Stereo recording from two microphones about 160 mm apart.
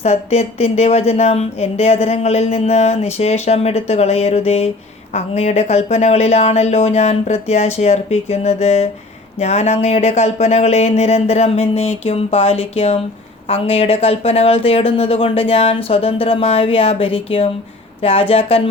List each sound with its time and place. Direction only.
0.0 s speech: 40° left (ahead or behind)